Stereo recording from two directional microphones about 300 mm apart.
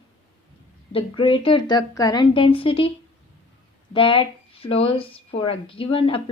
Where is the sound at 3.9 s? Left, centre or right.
Centre.